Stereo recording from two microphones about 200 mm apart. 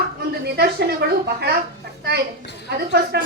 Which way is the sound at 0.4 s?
55° right (ahead or behind).